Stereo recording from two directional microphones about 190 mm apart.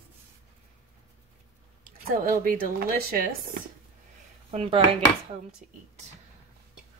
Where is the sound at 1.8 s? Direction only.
45° right (ahead or behind).